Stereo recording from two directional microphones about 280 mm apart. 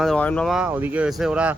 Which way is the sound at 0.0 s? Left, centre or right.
Centre.